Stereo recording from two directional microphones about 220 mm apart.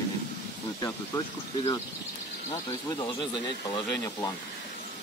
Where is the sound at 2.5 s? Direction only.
15° left (ahead or behind).